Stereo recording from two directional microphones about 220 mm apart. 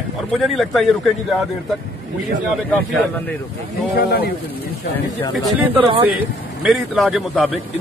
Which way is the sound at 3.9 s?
45° left (ahead or behind).